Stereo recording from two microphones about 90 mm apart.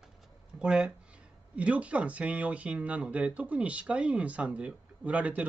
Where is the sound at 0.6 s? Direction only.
10° right (ahead or behind).